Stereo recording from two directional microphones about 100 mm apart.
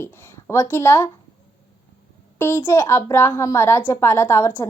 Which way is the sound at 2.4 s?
25° left (ahead or behind).